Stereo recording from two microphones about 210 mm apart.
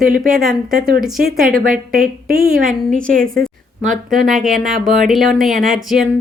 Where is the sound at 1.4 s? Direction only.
40° right (ahead or behind).